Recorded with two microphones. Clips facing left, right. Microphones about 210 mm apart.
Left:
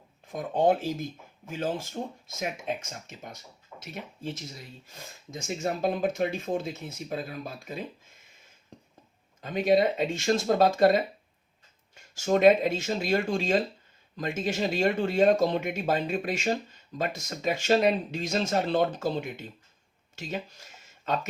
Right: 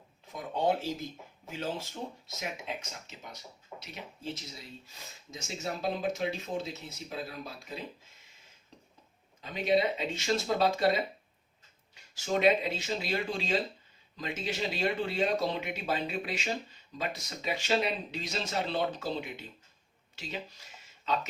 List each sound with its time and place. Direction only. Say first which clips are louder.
0.3 s speech: left 6 dB; 50° left (ahead or behind)
4.9 s speech: left 5 dB; 50° left (ahead or behind)
9.4 s speech: left 5 dB; 50° left (ahead or behind)
20.1 s a sound: left 5 dB; 50° left (ahead or behind)